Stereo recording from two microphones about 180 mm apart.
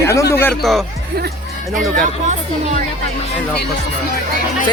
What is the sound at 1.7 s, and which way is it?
Speech, 45° right (ahead or behind).